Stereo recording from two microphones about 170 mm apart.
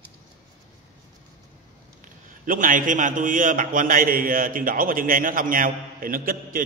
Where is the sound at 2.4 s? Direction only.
55° right (ahead or behind).